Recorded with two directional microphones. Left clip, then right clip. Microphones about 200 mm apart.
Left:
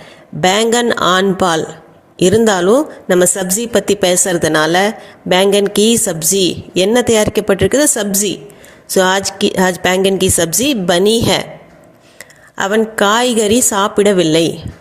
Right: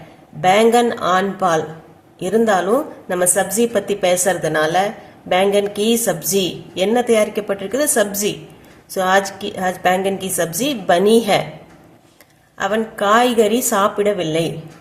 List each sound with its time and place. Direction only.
0.4 s a woman's voice: 45° left (ahead or behind)
12.5 s a woman's voice: 40° left (ahead or behind)